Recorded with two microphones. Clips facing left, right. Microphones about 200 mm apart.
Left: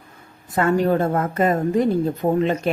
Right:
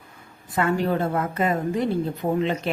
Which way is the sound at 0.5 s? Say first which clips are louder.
Left 4 dB; 45° left (ahead or behind).